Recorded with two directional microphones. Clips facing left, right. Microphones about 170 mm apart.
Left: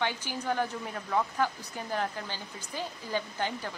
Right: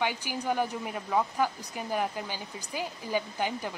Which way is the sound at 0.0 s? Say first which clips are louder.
Right 2 dB; 10° right (ahead or behind).